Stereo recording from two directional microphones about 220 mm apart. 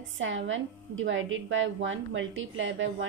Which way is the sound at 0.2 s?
60° right (ahead or behind).